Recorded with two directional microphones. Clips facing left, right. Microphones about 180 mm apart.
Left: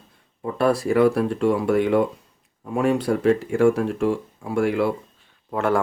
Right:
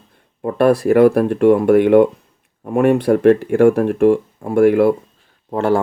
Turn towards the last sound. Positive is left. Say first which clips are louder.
# right 5 dB
turn(degrees=-30)  # may be behind; listen again after turning